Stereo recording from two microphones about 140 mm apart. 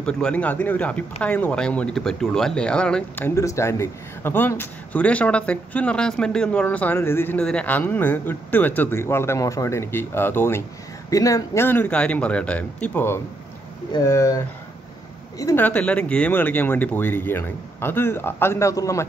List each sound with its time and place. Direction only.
0.0 s speech: 5° left (ahead or behind)